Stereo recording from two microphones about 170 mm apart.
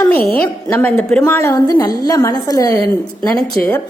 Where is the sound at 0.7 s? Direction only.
10° left (ahead or behind).